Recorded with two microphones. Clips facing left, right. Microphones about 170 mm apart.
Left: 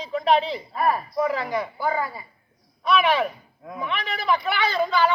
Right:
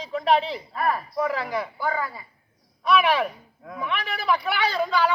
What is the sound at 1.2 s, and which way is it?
Speech, 5° right (ahead or behind).